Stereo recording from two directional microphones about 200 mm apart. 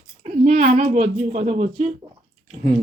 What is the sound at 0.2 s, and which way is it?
Speech, 35° right (ahead or behind).